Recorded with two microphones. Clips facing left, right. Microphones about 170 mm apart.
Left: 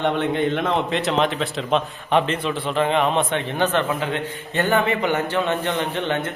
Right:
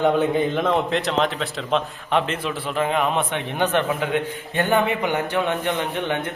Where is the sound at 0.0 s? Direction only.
Centre (ahead or behind).